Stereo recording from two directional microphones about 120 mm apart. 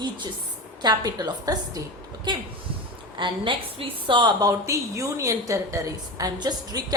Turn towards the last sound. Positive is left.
turn(degrees=-35)  # may be behind; listen again after turning